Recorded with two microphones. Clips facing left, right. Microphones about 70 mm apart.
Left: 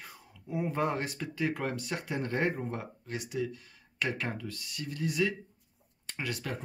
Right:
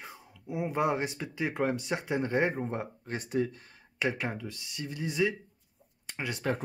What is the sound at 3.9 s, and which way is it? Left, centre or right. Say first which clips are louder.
Speech: right 2 dB; centre.